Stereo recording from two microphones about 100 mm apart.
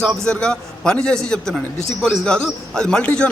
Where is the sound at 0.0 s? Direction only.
5° left (ahead or behind).